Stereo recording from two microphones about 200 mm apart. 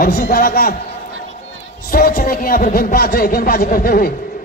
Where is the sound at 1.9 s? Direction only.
45° left (ahead or behind).